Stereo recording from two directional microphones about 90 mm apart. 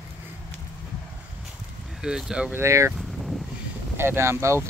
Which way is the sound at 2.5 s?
35° right (ahead or behind).